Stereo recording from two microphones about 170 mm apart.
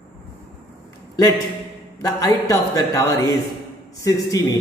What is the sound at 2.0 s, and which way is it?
Speech, 20° left (ahead or behind).